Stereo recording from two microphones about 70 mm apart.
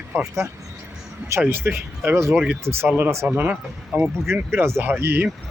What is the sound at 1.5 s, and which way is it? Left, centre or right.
Speech, right.